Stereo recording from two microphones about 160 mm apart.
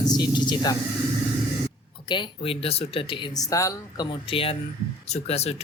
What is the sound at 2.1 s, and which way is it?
Speech, 30° left (ahead or behind).